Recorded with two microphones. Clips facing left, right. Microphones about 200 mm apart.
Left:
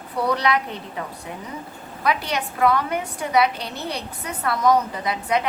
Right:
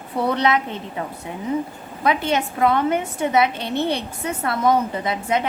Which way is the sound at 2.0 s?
25° right (ahead or behind).